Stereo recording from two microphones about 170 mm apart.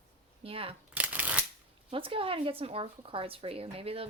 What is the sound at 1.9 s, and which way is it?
Speech, 30° right (ahead or behind).